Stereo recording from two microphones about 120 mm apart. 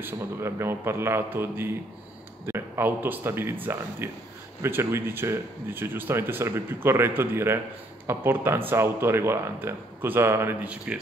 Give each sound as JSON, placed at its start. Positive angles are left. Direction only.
{"t": 0.0, "sound": "speech", "side_deg": -20}